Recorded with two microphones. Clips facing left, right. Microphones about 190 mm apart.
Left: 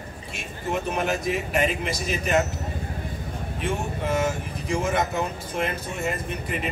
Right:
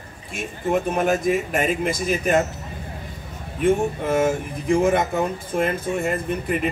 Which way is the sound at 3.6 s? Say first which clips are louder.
Right 9 dB; 50° right (ahead or behind).